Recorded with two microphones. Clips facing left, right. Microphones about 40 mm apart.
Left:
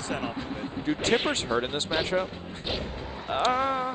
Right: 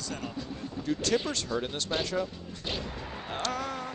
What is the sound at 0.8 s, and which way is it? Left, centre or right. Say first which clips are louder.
Speech: left 3 dB; left.